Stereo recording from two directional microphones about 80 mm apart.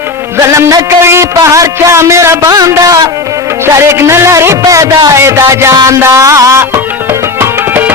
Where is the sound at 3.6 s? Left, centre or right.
Right.